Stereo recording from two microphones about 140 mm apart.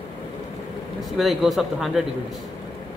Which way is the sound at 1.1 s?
Centre (ahead or behind).